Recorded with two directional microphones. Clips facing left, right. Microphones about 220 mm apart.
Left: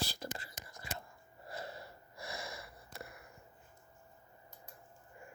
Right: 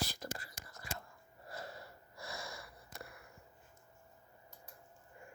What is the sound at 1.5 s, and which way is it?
Wheeze, 20° left (ahead or behind).